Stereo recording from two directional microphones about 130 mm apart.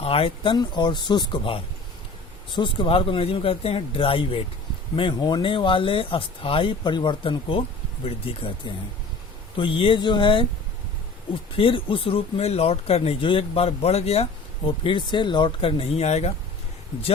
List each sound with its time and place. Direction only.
0.0 s speech: 45° left (ahead or behind)
11.5 s speech: 40° left (ahead or behind)
14.8 s speech: 40° left (ahead or behind)
15.8 s speech: 55° left (ahead or behind)